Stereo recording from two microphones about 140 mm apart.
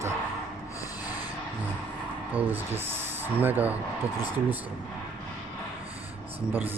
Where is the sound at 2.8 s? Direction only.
15° right (ahead or behind).